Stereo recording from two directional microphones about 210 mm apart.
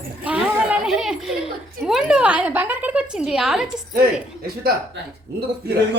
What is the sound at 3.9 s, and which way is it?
Speech, 45° right (ahead or behind).